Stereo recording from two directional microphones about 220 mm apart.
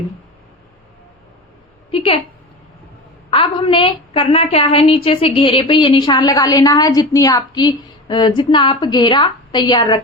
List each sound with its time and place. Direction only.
3.2 s a woman's voice: 25° left (ahead or behind)